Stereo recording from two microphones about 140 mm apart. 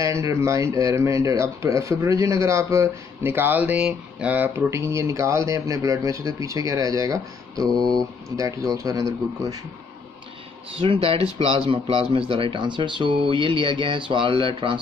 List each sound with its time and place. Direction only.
0.0 s speech: 20° right (ahead or behind)
10.8 s speech: 40° right (ahead or behind)